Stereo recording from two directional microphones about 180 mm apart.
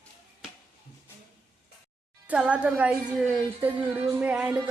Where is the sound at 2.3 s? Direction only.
5° right (ahead or behind).